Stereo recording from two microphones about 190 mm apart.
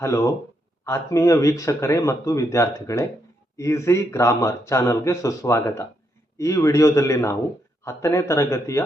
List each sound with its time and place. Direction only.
0.9 s speech: 15° left (ahead or behind)